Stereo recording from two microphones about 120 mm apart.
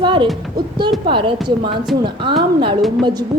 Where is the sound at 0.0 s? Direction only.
45° right (ahead or behind).